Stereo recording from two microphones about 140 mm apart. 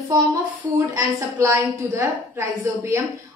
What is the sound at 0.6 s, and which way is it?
Child singing, 20° right (ahead or behind).